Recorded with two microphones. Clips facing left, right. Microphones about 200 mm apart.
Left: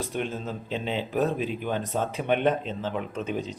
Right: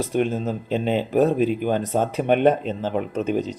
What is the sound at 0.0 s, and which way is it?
Speech, 45° right (ahead or behind).